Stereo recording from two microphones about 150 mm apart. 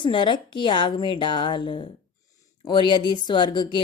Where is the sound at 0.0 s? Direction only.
30° left (ahead or behind).